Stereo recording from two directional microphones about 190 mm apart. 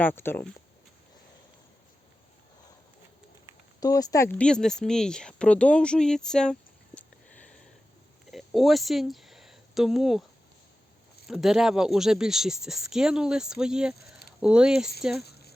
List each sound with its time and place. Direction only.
0.0 s speech: 10° left (ahead or behind)
3.8 s speech: 20° left (ahead or behind); by 10.2 s centre (ahead or behind)
11.3 s speech: centre (ahead or behind)
15.2 s a sound: 55° left (ahead or behind)